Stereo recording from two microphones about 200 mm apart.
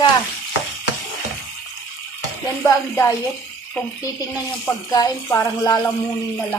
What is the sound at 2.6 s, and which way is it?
Speech, 15° left (ahead or behind).